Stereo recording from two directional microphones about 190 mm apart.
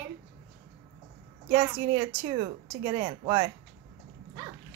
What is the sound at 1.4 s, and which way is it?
A woman's voice, 25° right (ahead or behind).